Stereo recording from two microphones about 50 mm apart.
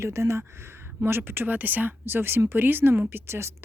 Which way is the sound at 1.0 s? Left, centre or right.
Right.